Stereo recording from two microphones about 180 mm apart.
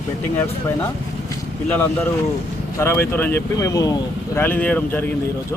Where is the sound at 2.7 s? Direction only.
15° left (ahead or behind).